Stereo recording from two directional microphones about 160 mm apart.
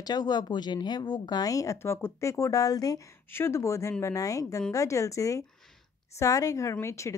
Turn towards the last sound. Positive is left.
turn(degrees=15)  # may be behind; listen again after turning